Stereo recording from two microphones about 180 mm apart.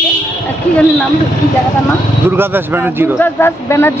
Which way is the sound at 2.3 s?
10° right (ahead or behind).